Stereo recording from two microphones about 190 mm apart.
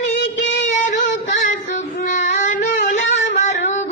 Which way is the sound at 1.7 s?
40° left (ahead or behind).